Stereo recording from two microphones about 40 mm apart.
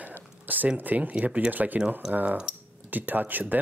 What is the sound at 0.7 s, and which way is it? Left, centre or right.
Speech, right.